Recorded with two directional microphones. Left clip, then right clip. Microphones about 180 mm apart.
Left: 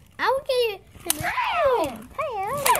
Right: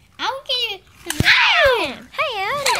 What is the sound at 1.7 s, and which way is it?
Speech, 25° right (ahead or behind).